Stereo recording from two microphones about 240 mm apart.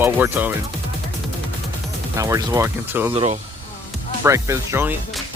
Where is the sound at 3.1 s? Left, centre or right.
Right.